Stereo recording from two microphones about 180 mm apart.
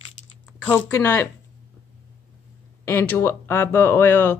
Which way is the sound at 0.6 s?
10° left (ahead or behind).